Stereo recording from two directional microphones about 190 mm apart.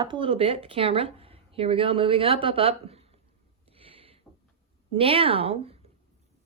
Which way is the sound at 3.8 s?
30° right (ahead or behind).